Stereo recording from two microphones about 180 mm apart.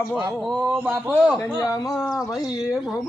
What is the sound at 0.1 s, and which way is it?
Speech, centre (ahead or behind).